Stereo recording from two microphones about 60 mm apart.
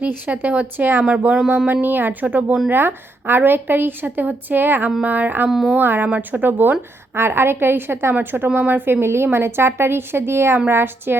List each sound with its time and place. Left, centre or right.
0.0 s a woman's voice: right
2.6 s a woman's voice: right
5.5 s speech: centre
5.7 s a woman's voice: right